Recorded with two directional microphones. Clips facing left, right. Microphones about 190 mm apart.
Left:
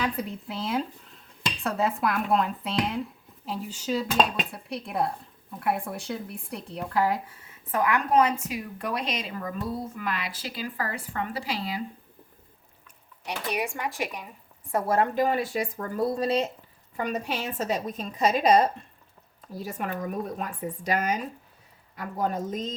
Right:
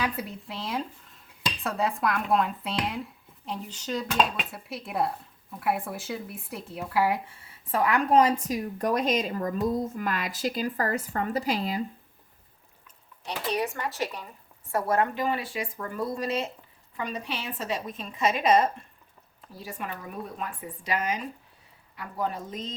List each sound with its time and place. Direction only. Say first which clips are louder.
0.0 s speech: left 2 dB; 5° right (ahead or behind)
7.3 s speech: right 2 dB; 30° right (ahead or behind); by 11.8 s 45° right (ahead or behind)
13.2 s speech: right 1 dB; 10° left (ahead or behind)
14.7 s a woman's voice: left 1 dB; 25° left (ahead or behind)
15.1 s a woman's voice: left 4 dB; 40° left (ahead or behind)
17.0 s a woman's voice: left 4 dB; 45° left (ahead or behind)